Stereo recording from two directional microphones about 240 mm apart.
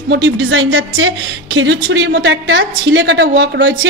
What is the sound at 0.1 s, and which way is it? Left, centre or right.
A woman's voice, right.